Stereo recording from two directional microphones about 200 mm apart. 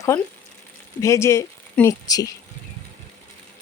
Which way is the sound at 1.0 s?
15° left (ahead or behind).